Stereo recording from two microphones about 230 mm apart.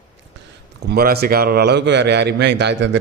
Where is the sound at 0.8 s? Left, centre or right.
Right.